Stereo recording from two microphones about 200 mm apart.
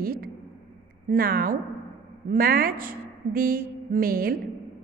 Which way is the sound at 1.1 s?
45° right (ahead or behind).